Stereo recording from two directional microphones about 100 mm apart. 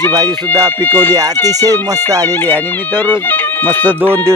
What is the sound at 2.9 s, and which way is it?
Speech, 20° left (ahead or behind).